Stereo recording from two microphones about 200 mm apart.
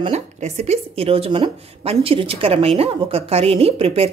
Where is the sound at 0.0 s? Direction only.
35° right (ahead or behind).